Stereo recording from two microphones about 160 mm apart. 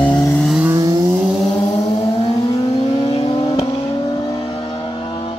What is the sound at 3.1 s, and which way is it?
Vehicle, 35° left (ahead or behind).